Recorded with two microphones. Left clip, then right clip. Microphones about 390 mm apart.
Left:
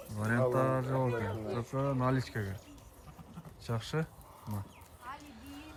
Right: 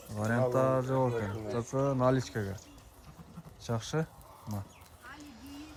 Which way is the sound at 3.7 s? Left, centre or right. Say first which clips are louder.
Right 3 dB; centre.